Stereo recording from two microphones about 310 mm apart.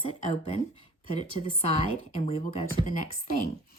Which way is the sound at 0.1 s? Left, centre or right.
Centre.